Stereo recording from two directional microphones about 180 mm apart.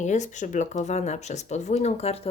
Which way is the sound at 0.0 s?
40° left (ahead or behind).